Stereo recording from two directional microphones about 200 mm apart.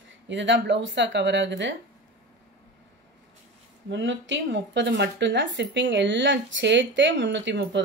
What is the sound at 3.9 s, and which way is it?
Speech, 65° right (ahead or behind).